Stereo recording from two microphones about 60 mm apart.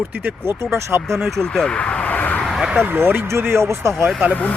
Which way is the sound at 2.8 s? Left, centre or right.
Right.